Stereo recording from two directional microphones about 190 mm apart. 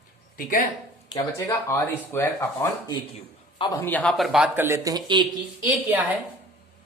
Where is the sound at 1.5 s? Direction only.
15° left (ahead or behind).